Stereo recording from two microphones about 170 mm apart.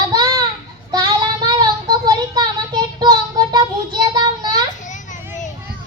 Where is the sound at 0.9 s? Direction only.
25° right (ahead or behind).